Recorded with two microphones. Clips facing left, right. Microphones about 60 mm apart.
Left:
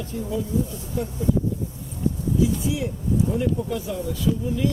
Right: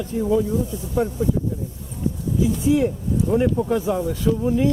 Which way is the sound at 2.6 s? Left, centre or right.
Right.